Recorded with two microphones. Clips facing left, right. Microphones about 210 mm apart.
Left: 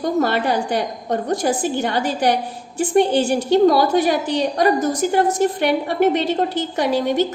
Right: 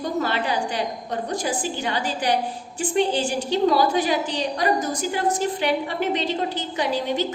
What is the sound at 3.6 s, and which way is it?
A woman's voice, 50° left (ahead or behind).